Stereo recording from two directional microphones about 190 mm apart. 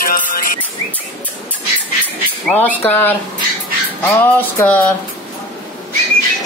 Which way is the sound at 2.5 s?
5° left (ahead or behind).